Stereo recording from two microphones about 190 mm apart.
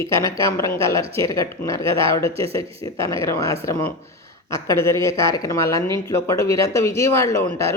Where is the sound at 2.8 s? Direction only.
15° left (ahead or behind).